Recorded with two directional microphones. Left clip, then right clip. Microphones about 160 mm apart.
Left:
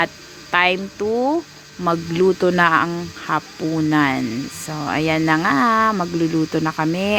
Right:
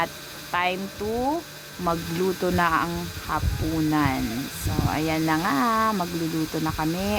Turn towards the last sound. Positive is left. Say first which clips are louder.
# left 6 dB
turn(degrees=35)  # may be behind; listen again after turning